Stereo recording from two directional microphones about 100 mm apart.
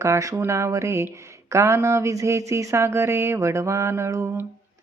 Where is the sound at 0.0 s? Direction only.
30° right (ahead or behind).